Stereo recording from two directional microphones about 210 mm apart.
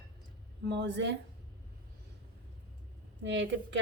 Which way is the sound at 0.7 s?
55° right (ahead or behind).